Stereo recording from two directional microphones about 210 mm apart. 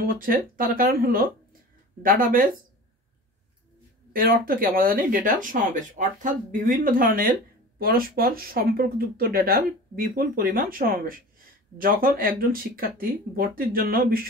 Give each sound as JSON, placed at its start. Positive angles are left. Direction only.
{"t": 0.0, "sound": "speech", "side_deg": -45}
{"t": 4.1, "sound": "speech", "side_deg": -45}